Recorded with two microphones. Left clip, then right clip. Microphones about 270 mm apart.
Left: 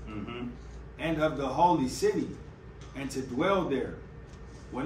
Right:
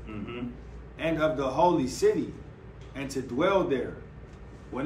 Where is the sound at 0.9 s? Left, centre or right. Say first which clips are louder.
Right 3 dB; centre.